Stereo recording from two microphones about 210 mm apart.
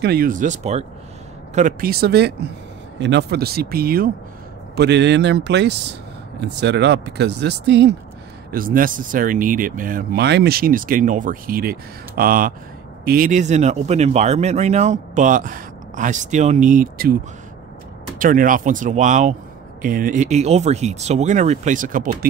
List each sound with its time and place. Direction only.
0.0 s a man's voice: 45° right (ahead or behind)
8.5 s a man's voice: 40° right (ahead or behind)
18.2 s a man's voice: 40° right (ahead or behind)